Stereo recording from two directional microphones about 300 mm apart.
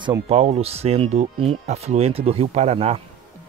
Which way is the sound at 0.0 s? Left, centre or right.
Centre.